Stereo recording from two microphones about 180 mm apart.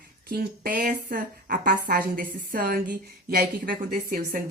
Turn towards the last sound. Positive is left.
turn(degrees=-50)  # may be behind; listen again after turning